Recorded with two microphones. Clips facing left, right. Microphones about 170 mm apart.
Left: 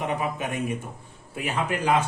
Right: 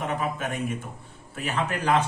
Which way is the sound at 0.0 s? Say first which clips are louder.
Left 1 dB; 15° left (ahead or behind).